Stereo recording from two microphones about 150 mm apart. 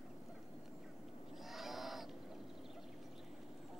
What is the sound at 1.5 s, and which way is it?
Owl, centre (ahead or behind).